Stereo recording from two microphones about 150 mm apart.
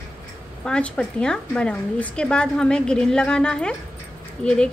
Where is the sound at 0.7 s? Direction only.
5° left (ahead or behind).